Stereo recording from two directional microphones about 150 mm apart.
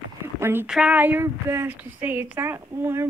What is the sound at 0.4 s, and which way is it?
Speech, 15° right (ahead or behind).